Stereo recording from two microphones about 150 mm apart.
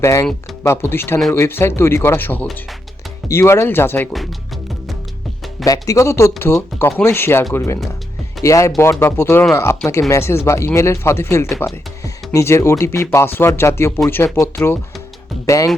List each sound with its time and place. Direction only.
0.0 s speech: 20° left (ahead or behind)
5.6 s speech: 25° left (ahead or behind)